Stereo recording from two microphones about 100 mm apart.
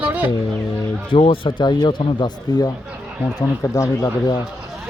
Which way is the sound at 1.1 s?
70° left (ahead or behind).